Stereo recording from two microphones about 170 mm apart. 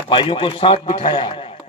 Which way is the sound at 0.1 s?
30° left (ahead or behind).